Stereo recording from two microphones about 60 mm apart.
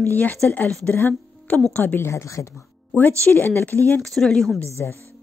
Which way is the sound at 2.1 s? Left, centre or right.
Left.